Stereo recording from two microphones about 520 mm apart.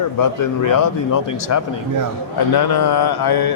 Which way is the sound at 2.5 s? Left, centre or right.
Left.